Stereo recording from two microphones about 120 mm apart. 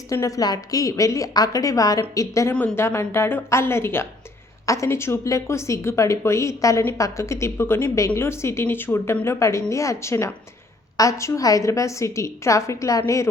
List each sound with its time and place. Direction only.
0.1 s a woman's voice: 30° left (ahead or behind)